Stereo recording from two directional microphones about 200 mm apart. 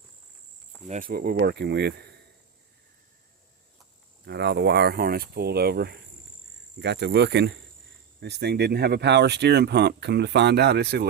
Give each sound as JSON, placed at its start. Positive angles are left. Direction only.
{"t": 0.9, "sound": "speech", "side_deg": -45}
{"t": 4.3, "sound": "speech", "side_deg": -60}